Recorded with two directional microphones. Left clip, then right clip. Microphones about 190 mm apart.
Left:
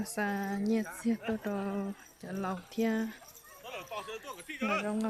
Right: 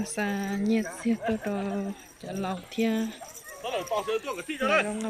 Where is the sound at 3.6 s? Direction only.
55° right (ahead or behind).